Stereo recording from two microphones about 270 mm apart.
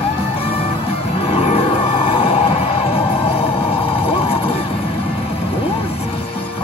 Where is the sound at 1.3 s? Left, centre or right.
Left.